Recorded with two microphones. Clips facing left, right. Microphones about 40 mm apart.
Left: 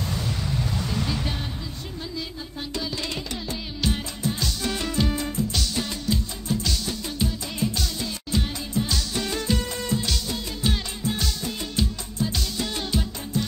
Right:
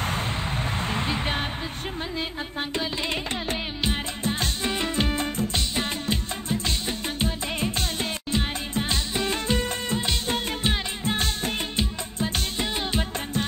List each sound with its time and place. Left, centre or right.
0.0 s music: right
2.7 s music: right
5.6 s music: right